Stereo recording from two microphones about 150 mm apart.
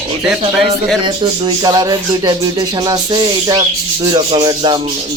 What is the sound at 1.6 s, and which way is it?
Music, 25° right (ahead or behind).